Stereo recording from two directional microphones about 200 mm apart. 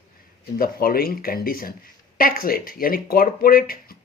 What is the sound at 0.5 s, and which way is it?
Speech, 45° left (ahead or behind).